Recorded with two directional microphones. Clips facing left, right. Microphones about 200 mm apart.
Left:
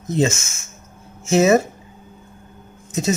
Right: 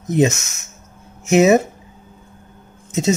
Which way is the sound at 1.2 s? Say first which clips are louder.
Right 2 dB; 20° right (ahead or behind).